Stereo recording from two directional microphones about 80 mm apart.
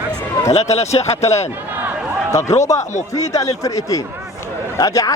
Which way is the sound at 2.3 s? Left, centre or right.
Left.